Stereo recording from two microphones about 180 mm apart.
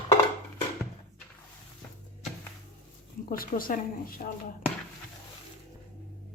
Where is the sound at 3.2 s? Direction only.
50° left (ahead or behind).